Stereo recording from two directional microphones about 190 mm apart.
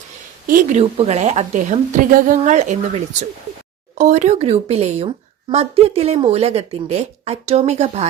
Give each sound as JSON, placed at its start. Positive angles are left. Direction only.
{"t": 0.4, "sound": "speech", "side_deg": -40}